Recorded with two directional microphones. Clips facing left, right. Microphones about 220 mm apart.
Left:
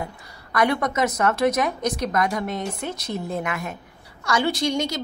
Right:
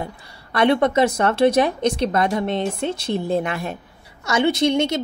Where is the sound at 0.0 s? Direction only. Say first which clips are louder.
Right 2 dB; 30° right (ahead or behind).